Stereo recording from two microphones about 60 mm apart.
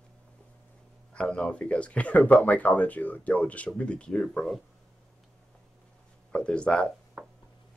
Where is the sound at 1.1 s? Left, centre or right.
Centre.